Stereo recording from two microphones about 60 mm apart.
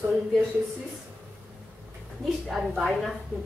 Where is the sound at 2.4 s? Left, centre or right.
Centre.